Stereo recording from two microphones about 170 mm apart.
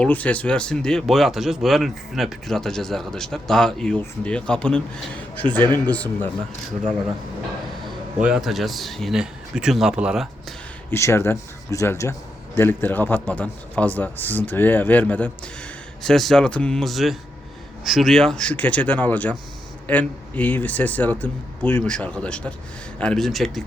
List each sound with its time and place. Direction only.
0.0 s a man's voice: 10° left (ahead or behind)
8.2 s speech: 5° right (ahead or behind)
10.9 s a man's voice: 15° left (ahead or behind)